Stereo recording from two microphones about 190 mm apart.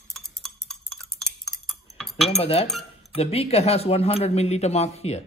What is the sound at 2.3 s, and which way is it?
Speech, 30° left (ahead or behind).